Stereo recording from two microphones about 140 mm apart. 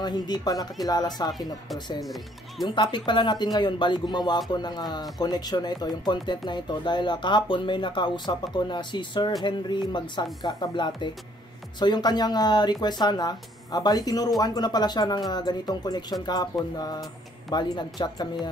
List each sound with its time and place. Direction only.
0.0 s speech: 30° left (ahead or behind)
2.6 s speech: 35° left (ahead or behind)